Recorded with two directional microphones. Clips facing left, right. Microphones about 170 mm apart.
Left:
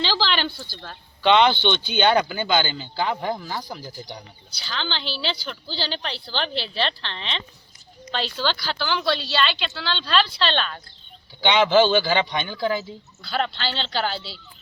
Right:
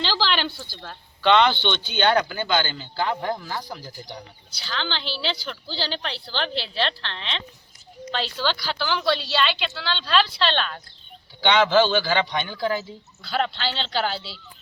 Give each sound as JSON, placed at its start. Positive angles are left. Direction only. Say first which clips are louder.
{"t": 0.0, "sound": "speech", "louder": "left 1 dB", "side_deg": 0}
{"t": 1.2, "sound": "a man's voice", "louder": "left 1 dB", "side_deg": 15}
{"t": 11.3, "sound": "a man's voice", "louder": "left 1 dB", "side_deg": 15}
{"t": 12.1, "sound": "a man's voice", "louder": "left 1 dB", "side_deg": 10}